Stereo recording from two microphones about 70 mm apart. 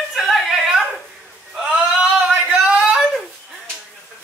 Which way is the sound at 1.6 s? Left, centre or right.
Centre.